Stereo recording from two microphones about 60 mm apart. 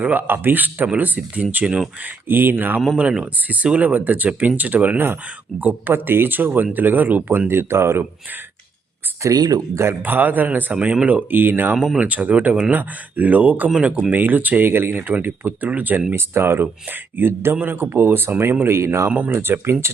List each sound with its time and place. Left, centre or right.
0.0 s speech: right
2.2 s speech: right
3.0 s speech: centre
5.9 s speech: right
9.2 s speech: right
10.0 s speech: right